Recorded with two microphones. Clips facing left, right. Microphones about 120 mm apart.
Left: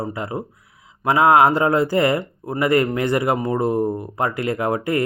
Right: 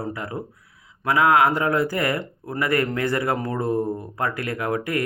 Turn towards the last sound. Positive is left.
turn(degrees=25)  # may be behind; listen again after turning